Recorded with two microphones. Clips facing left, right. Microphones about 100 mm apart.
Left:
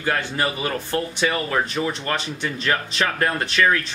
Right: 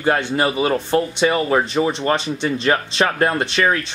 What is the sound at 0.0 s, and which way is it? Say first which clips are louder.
Speech: right 5 dB; 25° right (ahead or behind).